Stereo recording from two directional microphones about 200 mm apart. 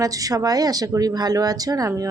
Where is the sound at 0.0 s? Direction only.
15° right (ahead or behind).